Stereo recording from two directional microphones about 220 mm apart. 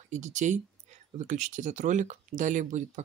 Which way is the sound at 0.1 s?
35° right (ahead or behind).